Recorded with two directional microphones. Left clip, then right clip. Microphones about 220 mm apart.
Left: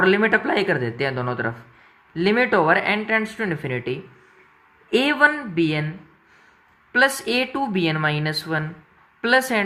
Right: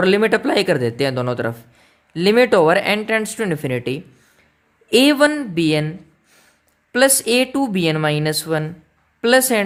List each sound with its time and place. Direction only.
0.0 s speech: 55° right (ahead or behind)
6.9 s speech: 45° right (ahead or behind)